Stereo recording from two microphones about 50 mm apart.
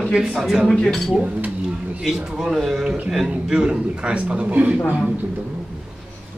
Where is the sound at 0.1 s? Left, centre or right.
Centre.